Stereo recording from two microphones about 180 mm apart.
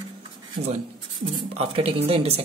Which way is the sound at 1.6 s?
30° right (ahead or behind).